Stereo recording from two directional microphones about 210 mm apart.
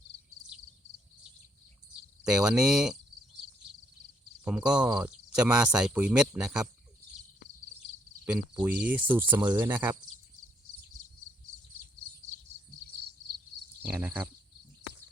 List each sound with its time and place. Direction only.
2.2 s speech: 5° right (ahead or behind)
4.4 s speech: 5° right (ahead or behind)
8.2 s cricket: 5° right (ahead or behind)
8.6 s speech: 5° right (ahead or behind)
9.4 s cricket: 20° right (ahead or behind)
13.8 s cricket: 10° right (ahead or behind)